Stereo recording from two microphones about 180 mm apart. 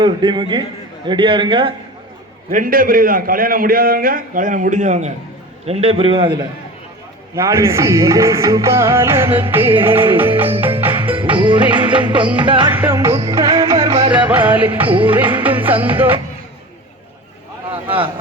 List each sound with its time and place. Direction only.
0.0 s a man's voice: 25° right (ahead or behind)
2.5 s a man's voice: 50° right (ahead or behind); by 6.3 s 30° right (ahead or behind)
7.3 s music: 15° right (ahead or behind)
11.1 s music: 30° right (ahead or behind)
12.4 s a man's voice: 25° right (ahead or behind)
12.7 s music: 10° right (ahead or behind)
14.8 s a man's voice: 30° right (ahead or behind)
15.4 s music: 10° right (ahead or behind)